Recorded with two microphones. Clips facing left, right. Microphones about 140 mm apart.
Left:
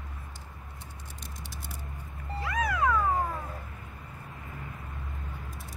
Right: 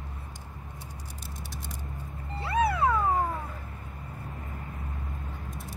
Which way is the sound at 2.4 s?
30° right (ahead or behind).